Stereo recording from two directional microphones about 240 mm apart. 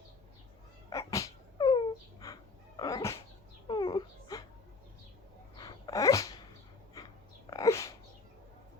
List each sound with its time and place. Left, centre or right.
0.9 s dog: centre
3.7 s baby cry: centre
5.5 s sneeze: centre
7.5 s a sound: centre